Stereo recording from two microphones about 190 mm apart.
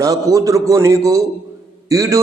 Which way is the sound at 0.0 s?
20° right (ahead or behind).